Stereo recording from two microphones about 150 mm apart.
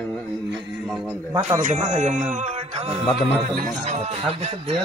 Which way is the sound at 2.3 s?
45° right (ahead or behind).